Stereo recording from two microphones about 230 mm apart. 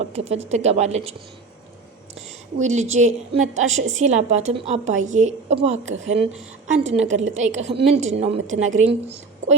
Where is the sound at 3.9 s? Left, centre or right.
Right.